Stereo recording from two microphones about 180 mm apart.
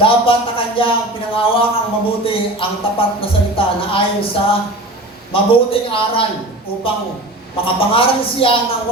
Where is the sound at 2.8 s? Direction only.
30° left (ahead or behind).